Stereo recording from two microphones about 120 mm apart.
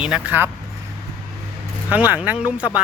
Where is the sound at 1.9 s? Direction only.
15° right (ahead or behind).